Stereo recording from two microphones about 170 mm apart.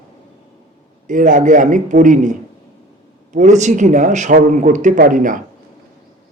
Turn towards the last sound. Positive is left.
turn(degrees=-50)  # may be behind; listen again after turning